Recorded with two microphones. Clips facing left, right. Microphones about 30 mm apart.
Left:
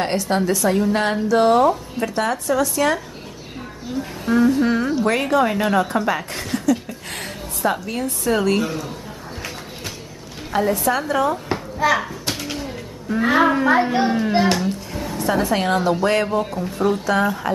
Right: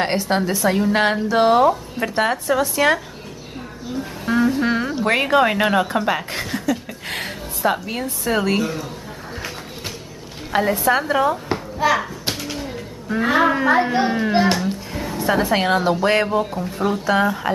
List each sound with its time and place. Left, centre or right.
0.0 s a woman's voice: right
4.3 s music: centre
4.9 s a woman's voice: right
5.3 s a woman's voice: right; by 6.6 s centre
6.7 s a sound: centre
8.2 s a woman's voice: centre
10.5 s a woman's voice: right
11.5 s a sound: centre
13.2 s a woman's voice: centre
16.3 s speech: centre